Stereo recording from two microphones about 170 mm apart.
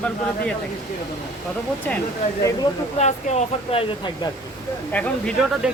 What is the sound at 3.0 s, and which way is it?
Speech, 40° left (ahead or behind).